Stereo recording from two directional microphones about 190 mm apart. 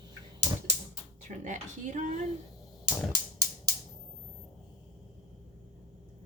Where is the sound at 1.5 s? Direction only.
40° right (ahead or behind).